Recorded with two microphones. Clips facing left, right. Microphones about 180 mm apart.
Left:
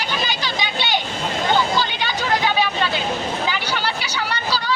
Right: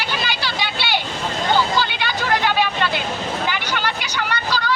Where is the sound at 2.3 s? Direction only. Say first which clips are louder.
Right 1 dB; 10° left (ahead or behind).